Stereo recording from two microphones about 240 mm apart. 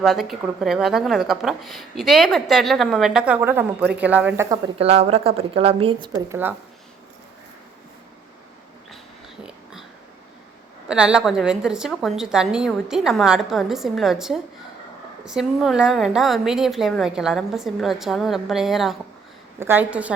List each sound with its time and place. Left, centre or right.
0.0 s speech: centre
4.8 s a woman's voice: right
9.4 s a sound: centre
10.8 s speech: centre